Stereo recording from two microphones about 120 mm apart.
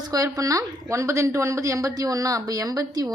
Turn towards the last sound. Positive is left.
turn(degrees=-30)  # may be behind; listen again after turning